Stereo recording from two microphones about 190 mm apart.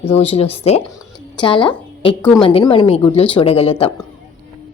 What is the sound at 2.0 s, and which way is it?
A woman's voice, 25° left (ahead or behind).